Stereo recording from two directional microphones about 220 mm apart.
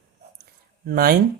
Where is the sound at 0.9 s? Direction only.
45° right (ahead or behind).